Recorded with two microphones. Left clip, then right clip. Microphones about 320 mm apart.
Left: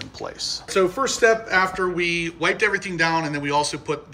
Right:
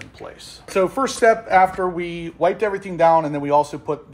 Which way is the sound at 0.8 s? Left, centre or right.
Right.